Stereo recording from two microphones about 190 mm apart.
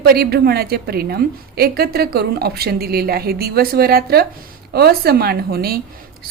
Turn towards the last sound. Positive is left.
turn(degrees=-55)  # may be behind; listen again after turning